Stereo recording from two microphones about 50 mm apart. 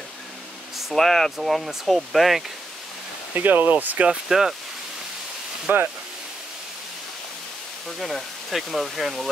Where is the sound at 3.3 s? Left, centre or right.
Right.